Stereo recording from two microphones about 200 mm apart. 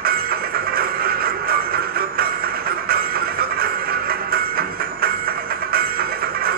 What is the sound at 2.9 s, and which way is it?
Train, 50° right (ahead or behind).